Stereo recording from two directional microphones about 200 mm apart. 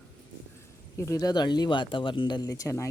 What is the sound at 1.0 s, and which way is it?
Speech, 15° left (ahead or behind).